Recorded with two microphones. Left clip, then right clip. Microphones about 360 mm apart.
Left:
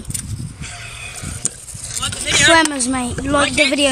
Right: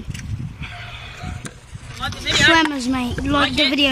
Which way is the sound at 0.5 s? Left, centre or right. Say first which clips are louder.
Left 1 dB; centre.